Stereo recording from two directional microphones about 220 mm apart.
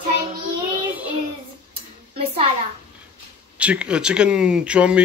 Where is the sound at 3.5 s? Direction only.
5° right (ahead or behind).